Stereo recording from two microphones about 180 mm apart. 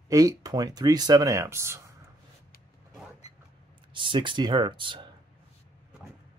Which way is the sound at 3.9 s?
25° right (ahead or behind).